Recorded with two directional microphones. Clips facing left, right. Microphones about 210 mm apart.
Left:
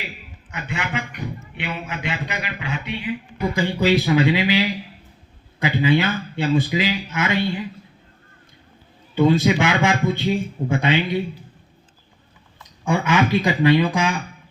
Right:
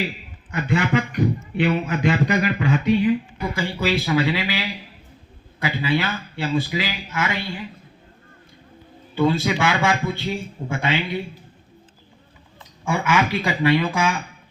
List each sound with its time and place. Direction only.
0.5 s a man's voice: 40° right (ahead or behind)
3.5 s a man's voice: 20° left (ahead or behind)
9.1 s a man's voice: 20° left (ahead or behind)
12.8 s a man's voice: 20° left (ahead or behind)